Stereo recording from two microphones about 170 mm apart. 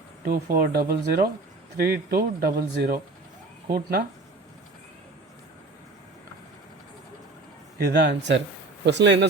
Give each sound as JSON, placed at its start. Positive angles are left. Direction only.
{"t": 0.3, "sound": "speech", "side_deg": -60}
{"t": 7.8, "sound": "speech", "side_deg": -85}